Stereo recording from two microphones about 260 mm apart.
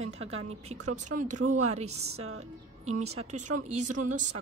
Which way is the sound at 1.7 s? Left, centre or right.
Right.